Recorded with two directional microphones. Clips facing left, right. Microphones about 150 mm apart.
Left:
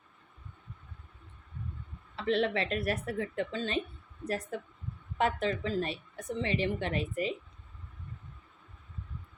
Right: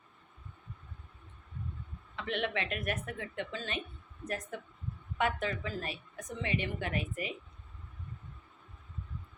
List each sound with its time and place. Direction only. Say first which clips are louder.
2.1 s a woman's voice: left 6 dB; 35° left (ahead or behind)